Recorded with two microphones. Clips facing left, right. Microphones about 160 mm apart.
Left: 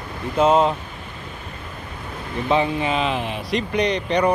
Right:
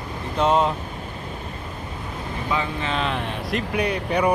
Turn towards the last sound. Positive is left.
turn(degrees=-5)  # may be behind; listen again after turning